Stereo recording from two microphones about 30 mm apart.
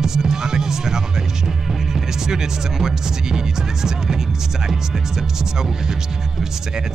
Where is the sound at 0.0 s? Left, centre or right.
Centre.